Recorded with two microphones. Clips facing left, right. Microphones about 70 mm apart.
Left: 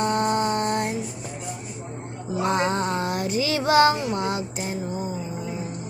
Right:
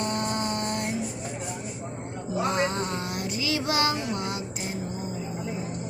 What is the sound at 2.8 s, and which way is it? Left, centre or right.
Child singing, left.